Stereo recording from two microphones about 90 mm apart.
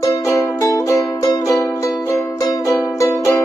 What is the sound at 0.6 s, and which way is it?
Music, 40° left (ahead or behind).